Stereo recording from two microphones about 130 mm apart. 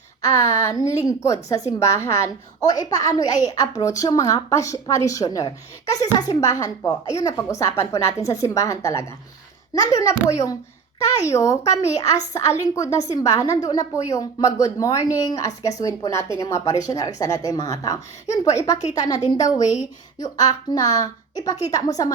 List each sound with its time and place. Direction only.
0.3 s a woman's voice: 25° left (ahead or behind)